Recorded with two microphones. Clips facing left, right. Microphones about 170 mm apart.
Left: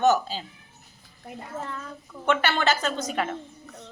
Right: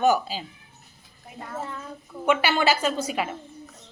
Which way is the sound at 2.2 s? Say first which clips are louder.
Right 2 dB; 10° right (ahead or behind).